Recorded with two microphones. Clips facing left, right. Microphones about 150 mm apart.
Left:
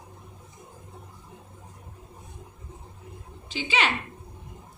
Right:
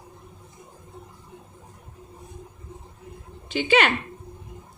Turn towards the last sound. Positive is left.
turn(degrees=-55)  # may be behind; listen again after turning